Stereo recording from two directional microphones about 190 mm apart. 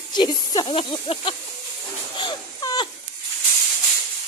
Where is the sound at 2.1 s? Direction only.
20° left (ahead or behind).